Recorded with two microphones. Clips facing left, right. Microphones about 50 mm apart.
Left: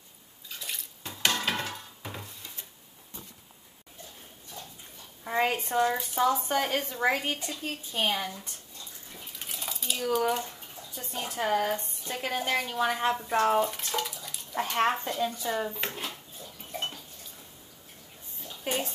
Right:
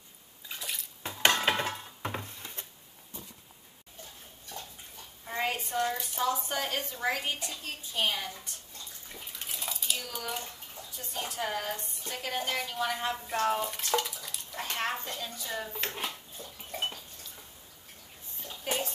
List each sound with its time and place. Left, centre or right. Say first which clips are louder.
0.6 s bathtub: even; centre
1.0 s a sound: right 3 dB; right
5.2 s a woman's voice: left 5 dB; left
9.4 s dishes: left 1 dB; centre
10.1 s speech: left 10 dB; centre
11.0 s a woman's voice: left 3 dB; left
13.7 s bathtub: right 1 dB; centre
14.5 s a woman's voice: left 7 dB; left
18.6 s speech: left 2 dB; centre